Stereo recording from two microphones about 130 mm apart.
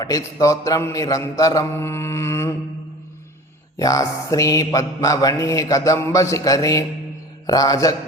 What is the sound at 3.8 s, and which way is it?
A man's voice, 25° left (ahead or behind).